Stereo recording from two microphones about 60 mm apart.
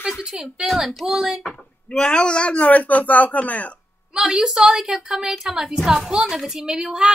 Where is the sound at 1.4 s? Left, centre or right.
Centre.